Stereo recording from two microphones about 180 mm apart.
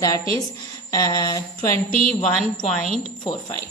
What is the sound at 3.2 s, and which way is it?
Speech, 20° left (ahead or behind).